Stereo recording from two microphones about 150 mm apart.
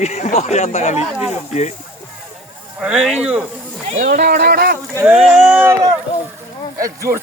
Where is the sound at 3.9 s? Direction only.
60° right (ahead or behind); by 4.7 s 90° right.